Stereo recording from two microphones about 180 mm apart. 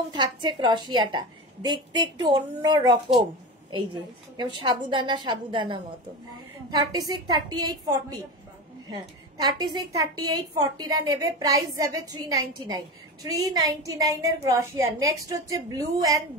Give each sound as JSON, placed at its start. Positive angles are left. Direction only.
{"t": 0.1, "sound": "a woman's voice", "side_deg": -25}